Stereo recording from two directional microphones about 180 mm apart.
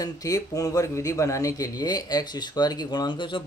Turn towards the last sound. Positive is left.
turn(degrees=25)  # may be behind; listen again after turning